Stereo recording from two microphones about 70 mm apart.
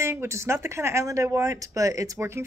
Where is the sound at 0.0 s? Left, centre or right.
Right.